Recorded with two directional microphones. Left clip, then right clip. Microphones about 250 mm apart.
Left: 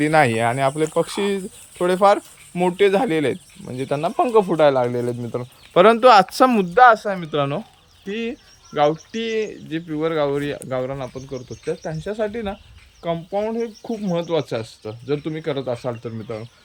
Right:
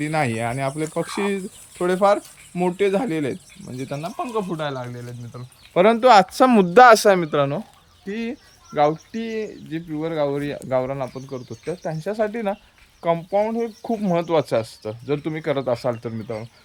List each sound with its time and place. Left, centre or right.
0.0 s speech: centre; by 5.5 s left
5.7 s speech: centre
6.7 s speech: right
7.3 s speech: centre